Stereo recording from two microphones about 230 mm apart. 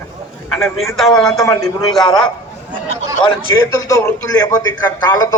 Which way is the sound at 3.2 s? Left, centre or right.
Centre.